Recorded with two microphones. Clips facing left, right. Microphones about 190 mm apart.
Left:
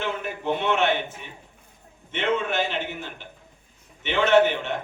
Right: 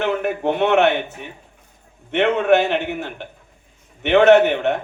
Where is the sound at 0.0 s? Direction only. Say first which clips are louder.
Right 9 dB; 65° right (ahead or behind).